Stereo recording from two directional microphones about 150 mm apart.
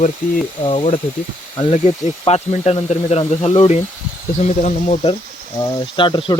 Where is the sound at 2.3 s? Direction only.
45° left (ahead or behind).